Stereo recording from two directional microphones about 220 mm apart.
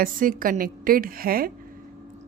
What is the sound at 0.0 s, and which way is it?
Speech, 40° right (ahead or behind).